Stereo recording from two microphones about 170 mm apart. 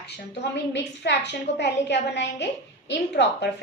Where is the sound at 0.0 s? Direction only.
90° left.